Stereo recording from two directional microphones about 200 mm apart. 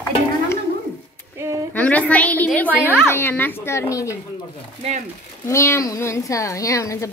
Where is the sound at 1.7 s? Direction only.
5° left (ahead or behind).